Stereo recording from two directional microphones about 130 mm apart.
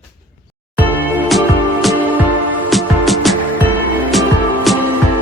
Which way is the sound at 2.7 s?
Centre (ahead or behind).